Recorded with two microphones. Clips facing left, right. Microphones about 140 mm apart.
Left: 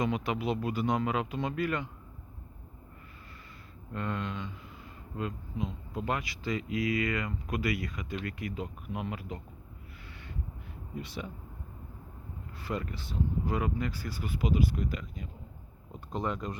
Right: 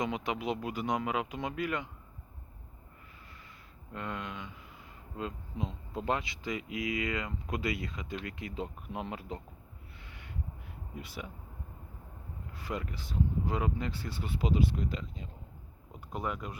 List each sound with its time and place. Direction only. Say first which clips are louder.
0.0 s speech: left 3 dB; 20° right (ahead or behind)
3.9 s speech: left 4 dB; 15° right (ahead or behind)
5.1 s speech: left 2 dB; 30° right (ahead or behind)
10.1 s a sound: left 3 dB; 15° right (ahead or behind)
11.0 s speech: left 3 dB; 10° right (ahead or behind)
12.5 s speech: left 2 dB; 15° right (ahead or behind)
15.9 s speech: left 3 dB; 5° right (ahead or behind)